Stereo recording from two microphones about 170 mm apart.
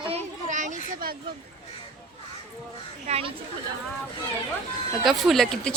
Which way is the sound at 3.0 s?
35° right (ahead or behind).